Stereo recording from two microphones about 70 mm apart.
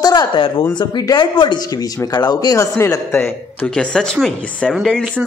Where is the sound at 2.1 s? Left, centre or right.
Left.